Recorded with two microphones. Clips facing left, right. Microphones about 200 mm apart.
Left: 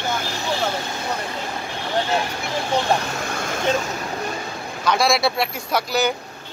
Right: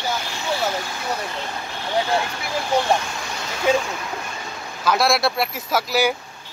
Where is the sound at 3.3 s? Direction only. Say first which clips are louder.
Left 4 dB; 50° left (ahead or behind).